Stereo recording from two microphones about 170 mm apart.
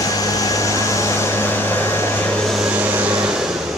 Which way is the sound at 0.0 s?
20° left (ahead or behind).